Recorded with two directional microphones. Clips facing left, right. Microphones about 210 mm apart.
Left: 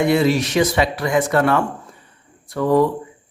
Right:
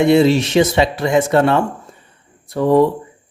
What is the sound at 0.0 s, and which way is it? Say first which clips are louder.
Speech: right 4 dB; 25° right (ahead or behind).